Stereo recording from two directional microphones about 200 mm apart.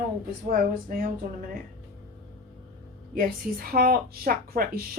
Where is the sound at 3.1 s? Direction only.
45° right (ahead or behind).